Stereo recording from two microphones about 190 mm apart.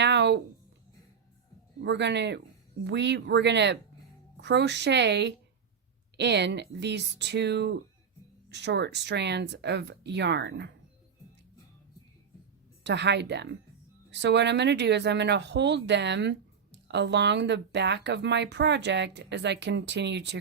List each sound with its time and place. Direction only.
0.0 s a sound: 65° right (ahead or behind)
1.8 s speech: 65° right (ahead or behind)
12.8 s speech: 65° right (ahead or behind)